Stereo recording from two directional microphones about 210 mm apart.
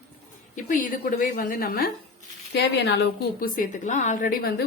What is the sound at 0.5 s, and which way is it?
A woman's voice, 40° left (ahead or behind).